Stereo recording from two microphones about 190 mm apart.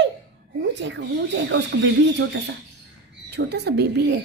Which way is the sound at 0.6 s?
70° right (ahead or behind).